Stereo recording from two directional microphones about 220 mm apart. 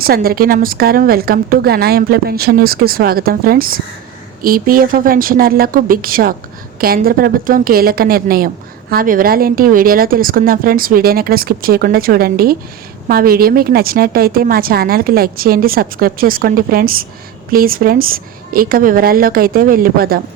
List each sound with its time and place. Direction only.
0.0 s a woman's voice: 40° right (ahead or behind)